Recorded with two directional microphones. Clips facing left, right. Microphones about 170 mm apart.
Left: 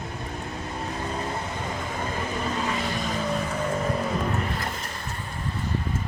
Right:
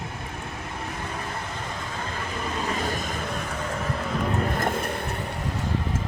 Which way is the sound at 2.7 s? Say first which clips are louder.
Even; 45° right (ahead or behind).